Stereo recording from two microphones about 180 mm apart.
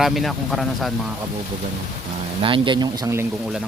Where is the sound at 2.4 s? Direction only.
30° right (ahead or behind).